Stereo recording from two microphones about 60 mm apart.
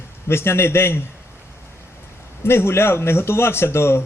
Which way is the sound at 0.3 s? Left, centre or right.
Left.